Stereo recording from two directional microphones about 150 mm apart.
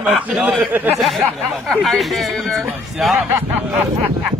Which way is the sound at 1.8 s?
Centre (ahead or behind).